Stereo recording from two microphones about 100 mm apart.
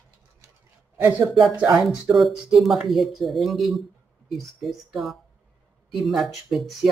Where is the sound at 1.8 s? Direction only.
Centre (ahead or behind).